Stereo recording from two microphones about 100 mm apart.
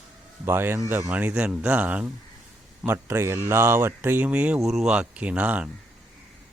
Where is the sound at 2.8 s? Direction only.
25° right (ahead or behind).